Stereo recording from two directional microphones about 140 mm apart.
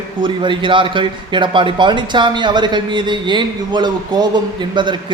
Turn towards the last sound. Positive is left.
turn(degrees=-35)  # may be behind; listen again after turning